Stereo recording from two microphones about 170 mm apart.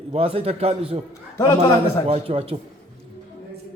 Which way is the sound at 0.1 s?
35° right (ahead or behind).